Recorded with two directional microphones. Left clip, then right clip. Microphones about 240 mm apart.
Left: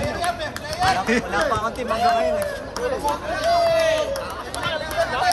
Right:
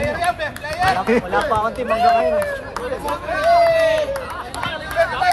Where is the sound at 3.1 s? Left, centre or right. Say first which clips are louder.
Right 6 dB; centre.